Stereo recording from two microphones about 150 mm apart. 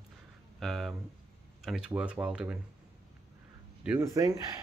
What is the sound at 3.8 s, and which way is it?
Speech, 20° right (ahead or behind).